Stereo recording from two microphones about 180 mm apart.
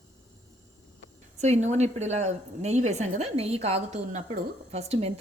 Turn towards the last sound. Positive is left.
turn(degrees=-35)  # may be behind; listen again after turning